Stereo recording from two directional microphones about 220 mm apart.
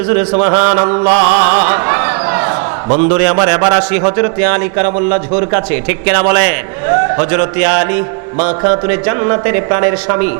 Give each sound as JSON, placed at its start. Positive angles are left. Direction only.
{"t": 0.3, "sound": "a man's voice", "side_deg": -25}
{"t": 1.2, "sound": "speech", "side_deg": -15}
{"t": 4.9, "sound": "speech", "side_deg": -30}
{"t": 5.5, "sound": "a man's voice", "side_deg": -15}